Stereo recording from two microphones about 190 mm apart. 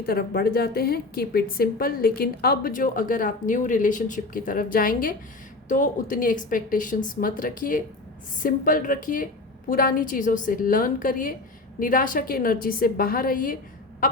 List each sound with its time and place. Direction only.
0.0 s a woman's voice: 50° left (ahead or behind)